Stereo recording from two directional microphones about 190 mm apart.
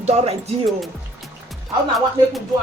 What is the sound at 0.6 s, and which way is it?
Speech, centre (ahead or behind).